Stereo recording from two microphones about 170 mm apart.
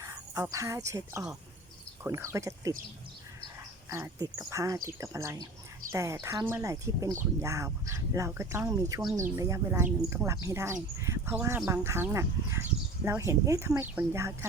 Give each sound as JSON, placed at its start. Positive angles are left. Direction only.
{"t": 0.0, "sound": "speech", "side_deg": -15}
{"t": 3.8, "sound": "speech", "side_deg": -20}